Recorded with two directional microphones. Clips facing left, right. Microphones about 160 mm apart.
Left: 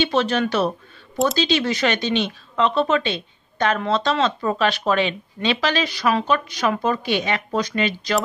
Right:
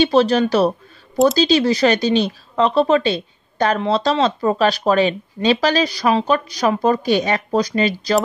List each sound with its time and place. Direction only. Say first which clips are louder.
0.0 s speech: right 6 dB; 35° right (ahead or behind)